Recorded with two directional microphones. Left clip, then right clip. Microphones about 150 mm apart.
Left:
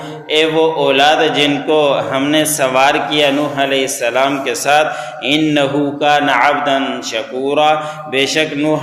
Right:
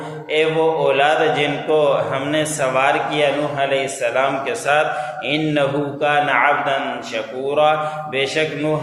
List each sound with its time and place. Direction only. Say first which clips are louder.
0.3 s a man's voice: left 4 dB; 35° left (ahead or behind)